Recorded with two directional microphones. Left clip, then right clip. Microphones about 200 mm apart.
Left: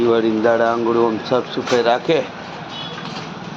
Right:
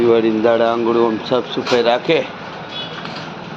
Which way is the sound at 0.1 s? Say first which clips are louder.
Right 2 dB; centre (ahead or behind).